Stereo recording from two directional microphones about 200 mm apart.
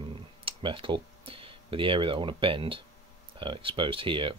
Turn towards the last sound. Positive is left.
turn(degrees=-25)  # may be behind; listen again after turning